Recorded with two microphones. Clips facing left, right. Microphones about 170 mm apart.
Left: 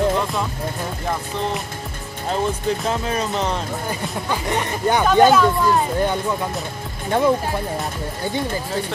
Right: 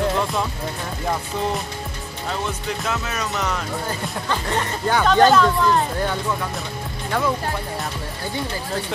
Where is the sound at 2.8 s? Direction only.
30° left (ahead or behind).